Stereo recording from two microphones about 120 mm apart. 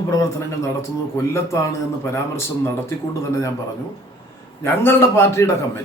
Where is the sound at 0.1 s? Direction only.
25° left (ahead or behind).